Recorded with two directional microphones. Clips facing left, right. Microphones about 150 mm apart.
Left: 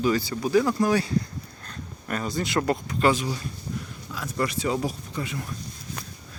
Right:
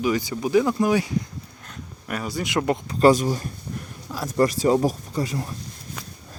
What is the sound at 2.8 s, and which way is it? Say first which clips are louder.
Speech: right 6 dB; 40° right (ahead or behind).